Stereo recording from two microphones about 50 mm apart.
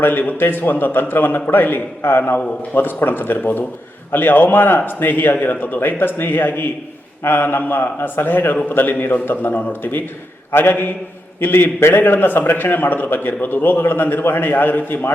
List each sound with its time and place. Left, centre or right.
0.0 s a man's voice: left